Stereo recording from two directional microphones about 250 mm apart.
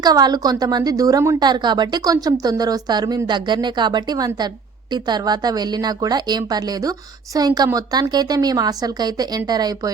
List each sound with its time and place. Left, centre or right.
0.0 s a woman's voice: centre